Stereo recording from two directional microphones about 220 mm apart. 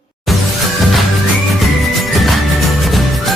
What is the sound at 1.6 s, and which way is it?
Music, centre (ahead or behind).